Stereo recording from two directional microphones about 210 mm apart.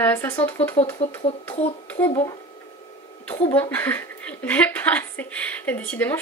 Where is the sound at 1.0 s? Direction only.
30° left (ahead or behind).